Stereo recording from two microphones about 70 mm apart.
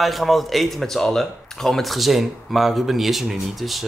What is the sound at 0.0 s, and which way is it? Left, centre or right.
Speech, centre.